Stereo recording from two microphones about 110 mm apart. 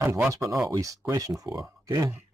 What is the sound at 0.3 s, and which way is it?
Speech, 30° right (ahead or behind).